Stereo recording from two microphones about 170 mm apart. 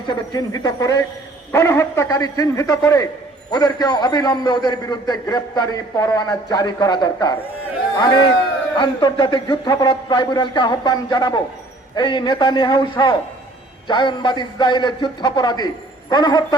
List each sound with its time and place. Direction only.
0.1 s a man's voice: 25° left (ahead or behind)